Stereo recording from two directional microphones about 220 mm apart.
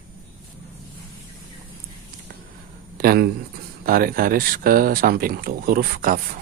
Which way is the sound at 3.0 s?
40° right (ahead or behind).